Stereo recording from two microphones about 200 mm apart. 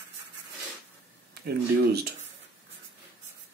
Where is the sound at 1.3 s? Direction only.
55° right (ahead or behind).